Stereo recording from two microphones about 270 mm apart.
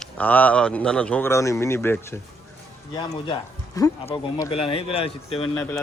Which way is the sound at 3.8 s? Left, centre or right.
Centre.